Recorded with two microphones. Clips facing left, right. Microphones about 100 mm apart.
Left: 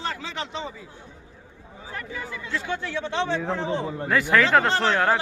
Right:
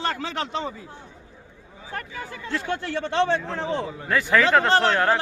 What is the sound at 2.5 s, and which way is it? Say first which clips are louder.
Speech: right 2 dB; 55° right (ahead or behind).